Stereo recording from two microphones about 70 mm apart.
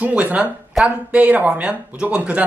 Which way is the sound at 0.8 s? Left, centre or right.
Centre.